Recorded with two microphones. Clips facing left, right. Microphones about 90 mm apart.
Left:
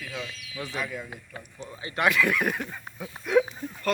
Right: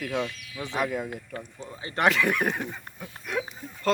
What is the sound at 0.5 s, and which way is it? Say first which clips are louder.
Speech: right 1 dB; 20° right (ahead or behind).